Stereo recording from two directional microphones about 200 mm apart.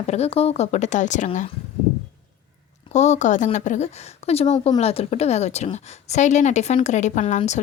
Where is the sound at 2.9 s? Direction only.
35° left (ahead or behind).